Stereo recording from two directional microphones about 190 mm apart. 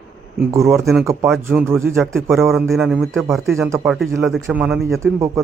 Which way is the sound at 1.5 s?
5° right (ahead or behind).